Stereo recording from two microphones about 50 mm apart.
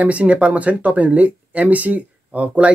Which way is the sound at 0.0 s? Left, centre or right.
Right.